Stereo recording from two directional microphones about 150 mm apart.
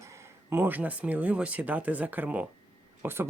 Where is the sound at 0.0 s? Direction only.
20° right (ahead or behind).